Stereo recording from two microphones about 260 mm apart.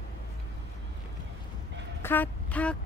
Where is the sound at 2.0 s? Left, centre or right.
Centre.